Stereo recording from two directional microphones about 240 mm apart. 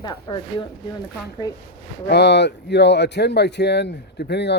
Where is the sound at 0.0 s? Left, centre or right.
Centre.